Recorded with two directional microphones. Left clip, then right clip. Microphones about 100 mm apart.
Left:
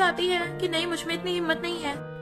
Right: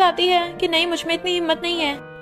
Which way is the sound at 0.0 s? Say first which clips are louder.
Right 7 dB; 45° right (ahead or behind).